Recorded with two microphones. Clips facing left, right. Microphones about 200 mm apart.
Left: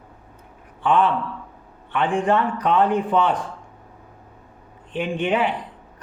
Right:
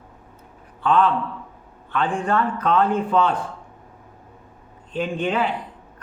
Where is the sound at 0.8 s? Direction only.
15° left (ahead or behind).